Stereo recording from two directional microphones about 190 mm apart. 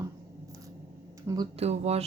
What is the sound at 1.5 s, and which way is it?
Speech, 35° right (ahead or behind).